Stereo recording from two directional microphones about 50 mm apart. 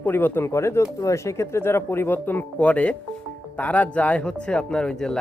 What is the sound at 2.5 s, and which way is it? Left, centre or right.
Speech, left.